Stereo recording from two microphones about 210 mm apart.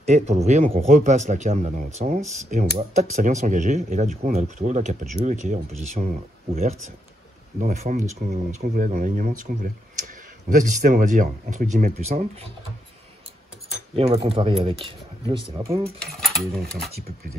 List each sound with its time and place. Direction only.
0.0 s speech: 30° right (ahead or behind)
13.9 s speech: 25° right (ahead or behind)
16.2 s speech: centre (ahead or behind)